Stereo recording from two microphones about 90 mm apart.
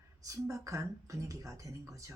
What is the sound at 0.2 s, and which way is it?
Speech, 40° right (ahead or behind).